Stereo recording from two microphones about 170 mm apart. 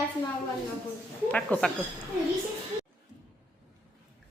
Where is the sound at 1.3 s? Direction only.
10° left (ahead or behind).